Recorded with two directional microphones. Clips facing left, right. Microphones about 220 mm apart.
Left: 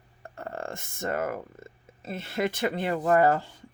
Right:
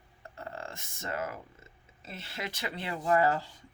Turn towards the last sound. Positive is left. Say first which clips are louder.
# left 5 dB
turn(degrees=50)  # may be behind; listen again after turning